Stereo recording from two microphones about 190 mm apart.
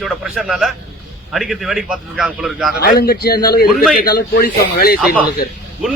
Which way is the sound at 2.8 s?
55° left (ahead or behind).